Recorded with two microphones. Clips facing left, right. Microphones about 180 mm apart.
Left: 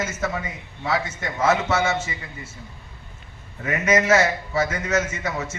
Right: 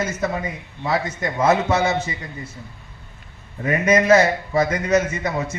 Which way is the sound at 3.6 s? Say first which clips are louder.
Right 3 dB; 35° right (ahead or behind).